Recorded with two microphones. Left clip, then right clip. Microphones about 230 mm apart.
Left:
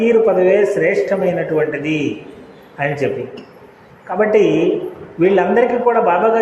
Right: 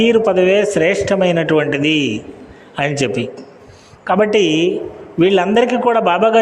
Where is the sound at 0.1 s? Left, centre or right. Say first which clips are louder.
Even; right.